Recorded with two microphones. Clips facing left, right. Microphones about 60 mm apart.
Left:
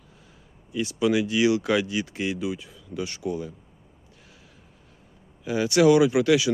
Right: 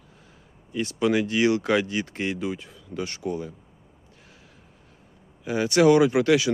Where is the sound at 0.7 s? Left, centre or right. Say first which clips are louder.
Even; right.